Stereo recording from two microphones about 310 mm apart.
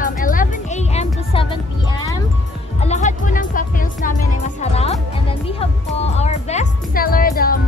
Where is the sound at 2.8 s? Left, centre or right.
Left.